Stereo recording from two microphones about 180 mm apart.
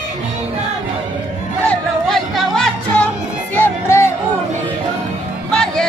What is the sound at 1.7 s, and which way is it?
Music, centre (ahead or behind).